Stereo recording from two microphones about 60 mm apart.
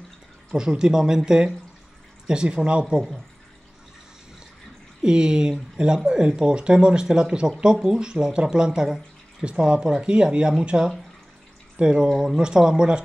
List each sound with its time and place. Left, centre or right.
0.6 s speech: centre
5.0 s speech: centre